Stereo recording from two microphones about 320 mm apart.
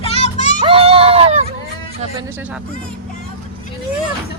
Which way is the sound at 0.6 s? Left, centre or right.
Centre.